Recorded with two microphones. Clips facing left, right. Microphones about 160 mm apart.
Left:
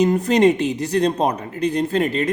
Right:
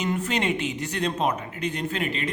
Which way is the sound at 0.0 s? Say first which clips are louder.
Left 11 dB; 40° left (ahead or behind).